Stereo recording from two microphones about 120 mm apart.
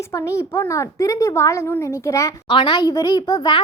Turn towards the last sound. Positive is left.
turn(degrees=30)  # may be behind; listen again after turning